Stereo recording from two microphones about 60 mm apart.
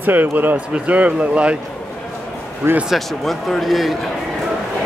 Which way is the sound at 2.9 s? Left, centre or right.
Centre.